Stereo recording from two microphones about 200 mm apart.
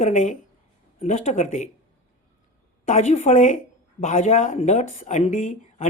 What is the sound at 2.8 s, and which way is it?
Speech, 35° left (ahead or behind).